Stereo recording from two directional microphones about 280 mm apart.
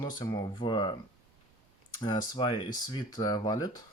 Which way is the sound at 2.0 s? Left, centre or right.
Centre.